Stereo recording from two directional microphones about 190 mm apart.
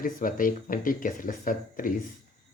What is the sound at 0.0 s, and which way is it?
Speech, 45° left (ahead or behind).